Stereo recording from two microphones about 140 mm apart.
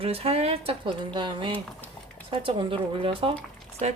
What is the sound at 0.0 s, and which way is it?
Speech, 45° right (ahead or behind).